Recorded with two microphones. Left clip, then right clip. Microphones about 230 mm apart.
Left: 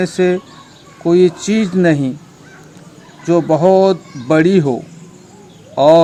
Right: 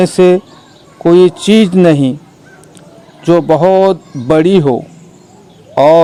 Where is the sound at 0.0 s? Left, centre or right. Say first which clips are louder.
Right 7 dB; right.